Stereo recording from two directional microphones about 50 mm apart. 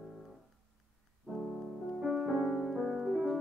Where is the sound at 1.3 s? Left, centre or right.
Centre.